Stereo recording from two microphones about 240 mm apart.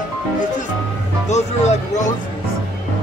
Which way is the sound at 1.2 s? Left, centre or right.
Left.